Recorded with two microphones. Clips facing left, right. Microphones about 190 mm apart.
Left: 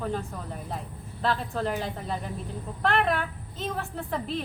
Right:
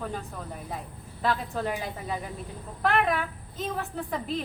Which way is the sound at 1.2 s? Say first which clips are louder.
Even; 10° right (ahead or behind).